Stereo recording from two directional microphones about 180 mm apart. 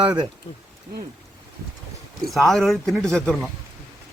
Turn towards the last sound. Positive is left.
turn(degrees=0)  # may be behind; listen again after turning